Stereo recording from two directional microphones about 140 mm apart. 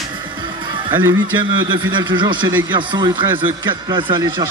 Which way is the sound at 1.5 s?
35° right (ahead or behind).